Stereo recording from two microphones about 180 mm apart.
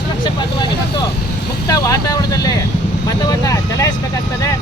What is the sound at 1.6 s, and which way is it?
Speech, 20° left (ahead or behind).